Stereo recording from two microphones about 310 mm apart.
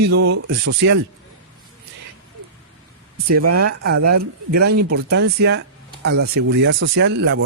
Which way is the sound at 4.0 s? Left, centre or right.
Right.